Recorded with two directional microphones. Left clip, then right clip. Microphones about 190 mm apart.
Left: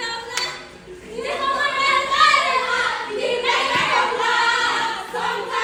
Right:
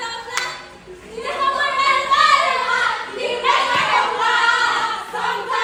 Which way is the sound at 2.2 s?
Centre (ahead or behind).